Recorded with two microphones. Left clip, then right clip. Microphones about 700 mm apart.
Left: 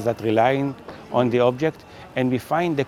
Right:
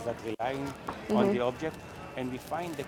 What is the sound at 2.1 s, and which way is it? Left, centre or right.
Speech, left.